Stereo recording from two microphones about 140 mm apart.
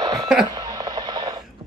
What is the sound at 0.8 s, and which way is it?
Radio, 30° right (ahead or behind).